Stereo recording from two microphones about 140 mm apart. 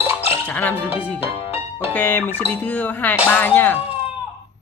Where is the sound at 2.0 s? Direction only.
15° left (ahead or behind).